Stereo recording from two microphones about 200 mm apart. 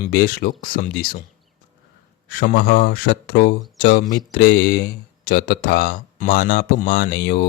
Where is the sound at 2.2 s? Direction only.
50° left (ahead or behind).